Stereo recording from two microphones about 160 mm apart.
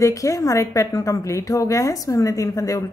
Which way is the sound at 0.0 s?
20° left (ahead or behind).